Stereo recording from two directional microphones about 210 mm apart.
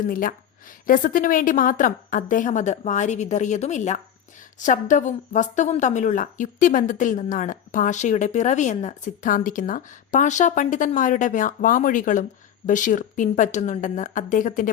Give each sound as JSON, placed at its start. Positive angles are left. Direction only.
{"t": 0.1, "sound": "a woman's voice", "side_deg": 40}